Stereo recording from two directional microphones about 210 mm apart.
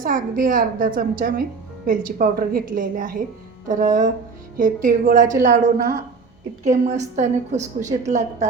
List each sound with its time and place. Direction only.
0.0 s a woman's voice: 40° right (ahead or behind)